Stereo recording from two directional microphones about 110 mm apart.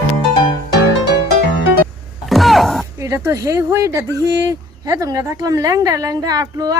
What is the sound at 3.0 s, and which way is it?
Speech, 30° right (ahead or behind).